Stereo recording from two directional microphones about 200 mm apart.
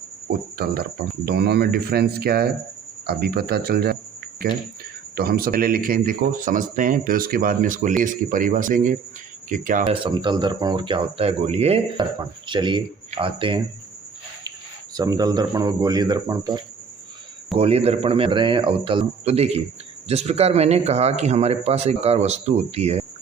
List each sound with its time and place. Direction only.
0.3 s speech: 50° right (ahead or behind)
9.9 s speech: 25° right (ahead or behind)
14.9 s speech: 20° right (ahead or behind)
17.6 s speech: 30° right (ahead or behind)